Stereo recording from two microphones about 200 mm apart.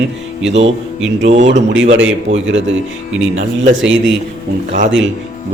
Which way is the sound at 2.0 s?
70° right (ahead or behind).